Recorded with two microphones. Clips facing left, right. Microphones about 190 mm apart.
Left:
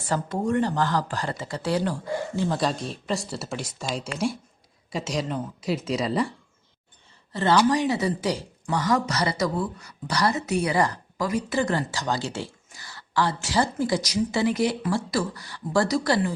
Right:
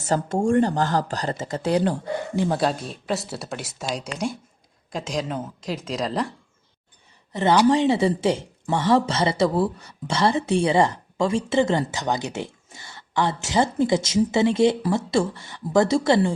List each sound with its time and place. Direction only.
0.1 s a woman's voice: 40° right (ahead or behind)
1.6 s speech: 20° right (ahead or behind)
2.6 s speech: 5° right (ahead or behind)
7.3 s speech: 20° right (ahead or behind)